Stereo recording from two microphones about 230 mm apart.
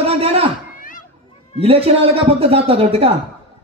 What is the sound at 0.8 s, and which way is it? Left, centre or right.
Children playing, left.